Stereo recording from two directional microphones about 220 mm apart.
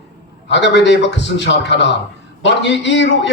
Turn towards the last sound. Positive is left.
turn(degrees=50)  # may be behind; listen again after turning